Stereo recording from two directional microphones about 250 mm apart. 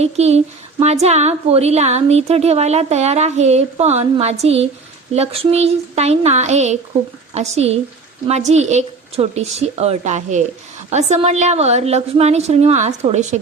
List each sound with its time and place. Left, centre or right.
0.0 s speech: right